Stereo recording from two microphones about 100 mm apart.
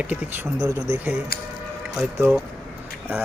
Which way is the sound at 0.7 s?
30° right (ahead or behind).